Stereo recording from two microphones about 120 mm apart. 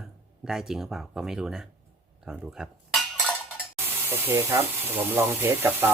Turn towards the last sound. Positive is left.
turn(degrees=-20)  # may be behind; listen again after turning